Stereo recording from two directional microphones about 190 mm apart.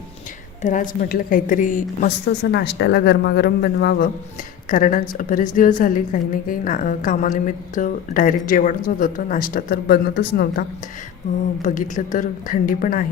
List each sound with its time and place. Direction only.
0.6 s a woman's voice: 40° left (ahead or behind)
2.4 s speech: 65° left (ahead or behind)
4.7 s a woman's voice: 45° left (ahead or behind)
11.6 s a woman's voice: 45° left (ahead or behind)